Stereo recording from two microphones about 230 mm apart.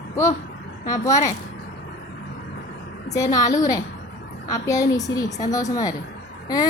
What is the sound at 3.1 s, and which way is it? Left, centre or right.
A woman's voice, centre.